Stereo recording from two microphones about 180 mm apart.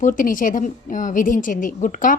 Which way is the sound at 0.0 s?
50° left (ahead or behind).